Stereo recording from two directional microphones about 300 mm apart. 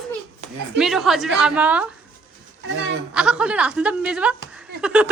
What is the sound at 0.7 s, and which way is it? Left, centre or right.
A woman's voice, centre.